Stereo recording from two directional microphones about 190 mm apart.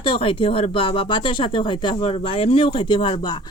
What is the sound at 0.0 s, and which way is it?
Speech, 25° left (ahead or behind).